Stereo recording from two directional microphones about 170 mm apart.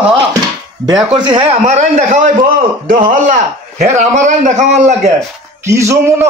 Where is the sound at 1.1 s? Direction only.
30° right (ahead or behind); by 5.1 s 45° right (ahead or behind).